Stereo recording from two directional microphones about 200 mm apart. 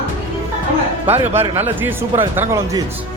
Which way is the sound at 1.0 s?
10° right (ahead or behind).